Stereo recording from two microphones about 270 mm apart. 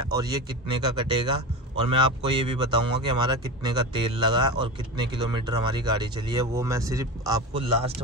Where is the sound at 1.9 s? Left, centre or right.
Centre.